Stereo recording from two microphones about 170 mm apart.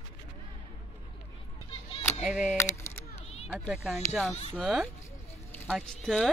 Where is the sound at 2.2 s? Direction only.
Centre (ahead or behind).